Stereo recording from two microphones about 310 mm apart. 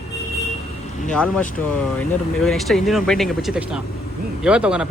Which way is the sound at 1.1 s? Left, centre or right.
Centre.